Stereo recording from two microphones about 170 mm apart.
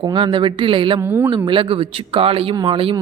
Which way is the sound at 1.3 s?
30° right (ahead or behind).